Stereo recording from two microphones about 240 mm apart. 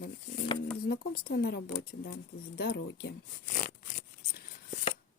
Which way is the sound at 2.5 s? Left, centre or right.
Left.